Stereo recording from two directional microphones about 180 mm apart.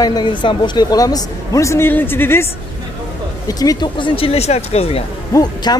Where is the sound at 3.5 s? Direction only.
20° left (ahead or behind).